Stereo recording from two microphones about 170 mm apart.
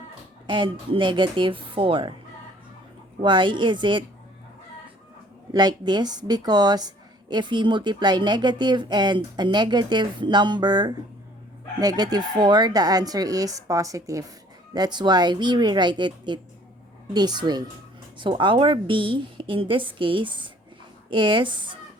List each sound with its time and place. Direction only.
0.4 s a woman's voice: 30° right (ahead or behind)
3.2 s a woman's voice: 30° right (ahead or behind)
5.5 s a woman's voice: 25° right (ahead or behind)